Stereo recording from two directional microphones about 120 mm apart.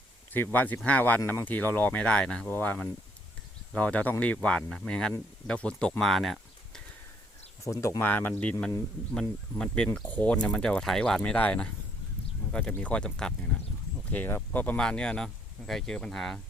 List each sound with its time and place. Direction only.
0.3 s speech: 15° left (ahead or behind)
7.6 s speech: 25° left (ahead or behind); by 16.4 s 5° left (ahead or behind)